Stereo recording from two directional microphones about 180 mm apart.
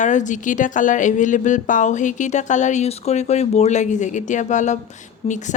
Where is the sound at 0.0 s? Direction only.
45° left (ahead or behind).